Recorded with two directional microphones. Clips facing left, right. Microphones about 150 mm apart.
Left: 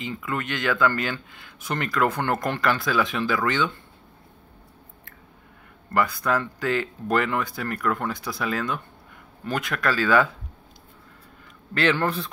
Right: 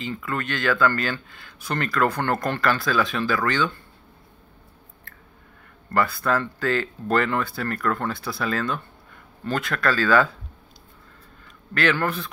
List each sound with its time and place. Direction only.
0.0 s speech: 15° left (ahead or behind)
5.9 s speech: 15° left (ahead or behind)
11.7 s speech: 25° left (ahead or behind)